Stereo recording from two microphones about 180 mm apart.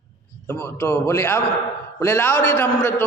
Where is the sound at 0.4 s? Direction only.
15° left (ahead or behind).